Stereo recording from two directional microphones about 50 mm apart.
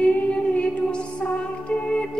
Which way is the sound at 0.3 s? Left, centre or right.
Left.